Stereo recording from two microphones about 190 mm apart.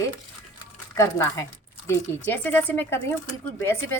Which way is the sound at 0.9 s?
15° left (ahead or behind).